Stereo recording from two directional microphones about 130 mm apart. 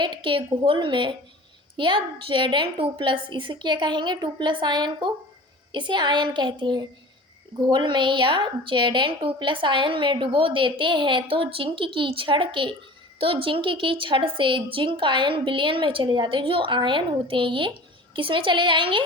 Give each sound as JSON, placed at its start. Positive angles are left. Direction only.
{"t": 0.0, "sound": "a woman's voice", "side_deg": -40}